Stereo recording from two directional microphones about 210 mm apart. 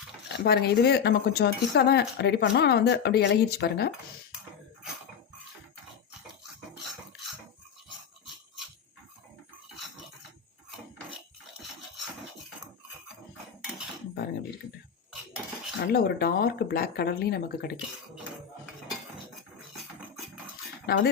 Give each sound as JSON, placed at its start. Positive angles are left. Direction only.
{"t": 0.3, "sound": "speech", "side_deg": 50}
{"t": 15.9, "sound": "speech", "side_deg": 50}
{"t": 20.1, "sound": "a sound", "side_deg": 0}
{"t": 20.8, "sound": "speech", "side_deg": 50}